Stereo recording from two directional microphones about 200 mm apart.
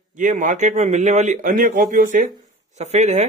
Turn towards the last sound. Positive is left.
turn(degrees=-35)  # may be behind; listen again after turning